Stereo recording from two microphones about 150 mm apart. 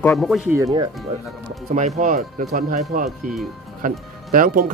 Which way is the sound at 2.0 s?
65° right (ahead or behind).